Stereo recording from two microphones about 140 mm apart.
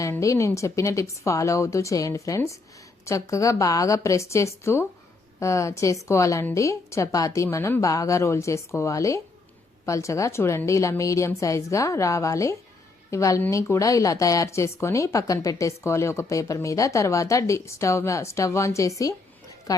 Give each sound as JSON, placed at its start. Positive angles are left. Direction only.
{"t": 0.0, "sound": "a woman's voice", "side_deg": 25}